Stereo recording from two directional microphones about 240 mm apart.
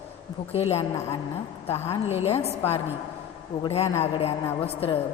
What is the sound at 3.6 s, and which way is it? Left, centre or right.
A woman's voice, left.